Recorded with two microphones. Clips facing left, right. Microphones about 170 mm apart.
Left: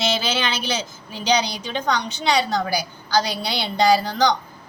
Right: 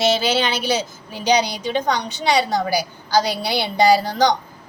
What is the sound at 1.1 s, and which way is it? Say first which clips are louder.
A woman's voice: right 3 dB; 10° right (ahead or behind).